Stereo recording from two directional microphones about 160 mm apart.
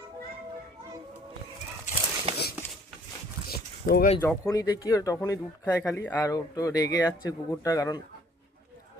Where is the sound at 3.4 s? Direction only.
75° left (ahead or behind).